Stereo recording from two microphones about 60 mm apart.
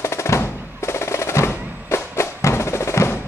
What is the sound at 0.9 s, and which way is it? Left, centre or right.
Music, left.